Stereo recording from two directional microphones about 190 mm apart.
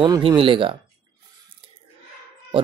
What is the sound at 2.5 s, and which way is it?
Speech, 30° right (ahead or behind).